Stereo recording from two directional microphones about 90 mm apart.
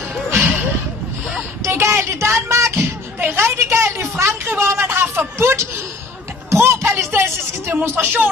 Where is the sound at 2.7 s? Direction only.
20° right (ahead or behind).